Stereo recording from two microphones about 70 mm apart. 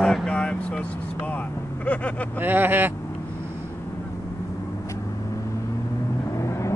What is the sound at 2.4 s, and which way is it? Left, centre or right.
Vehicle, right.